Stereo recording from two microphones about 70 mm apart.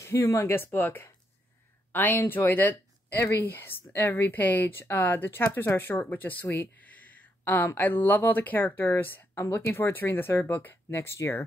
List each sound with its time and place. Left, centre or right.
0.0 s speech: left
0.6 s speech: left
6.4 s a sound: left
7.4 s speech: left